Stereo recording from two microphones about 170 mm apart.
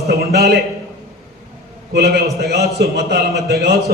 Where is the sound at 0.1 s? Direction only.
65° right (ahead or behind).